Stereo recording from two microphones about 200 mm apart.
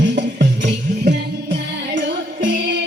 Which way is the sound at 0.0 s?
60° right (ahead or behind).